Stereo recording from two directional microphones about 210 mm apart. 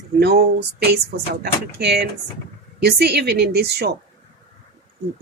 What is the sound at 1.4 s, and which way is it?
Speech, 50° right (ahead or behind).